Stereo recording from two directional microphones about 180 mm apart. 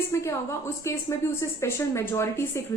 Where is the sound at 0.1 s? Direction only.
15° left (ahead or behind).